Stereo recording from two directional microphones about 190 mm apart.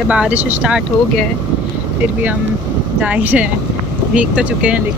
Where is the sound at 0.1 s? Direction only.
5° right (ahead or behind).